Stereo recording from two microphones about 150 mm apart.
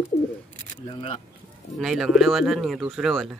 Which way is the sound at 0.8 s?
35° left (ahead or behind).